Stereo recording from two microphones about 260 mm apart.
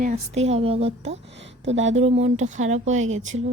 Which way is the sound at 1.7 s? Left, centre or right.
Right.